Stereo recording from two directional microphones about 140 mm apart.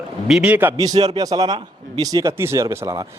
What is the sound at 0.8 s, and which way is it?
Speech, 30° right (ahead or behind).